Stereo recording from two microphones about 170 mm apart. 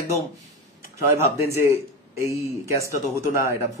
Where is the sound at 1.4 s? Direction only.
15° right (ahead or behind).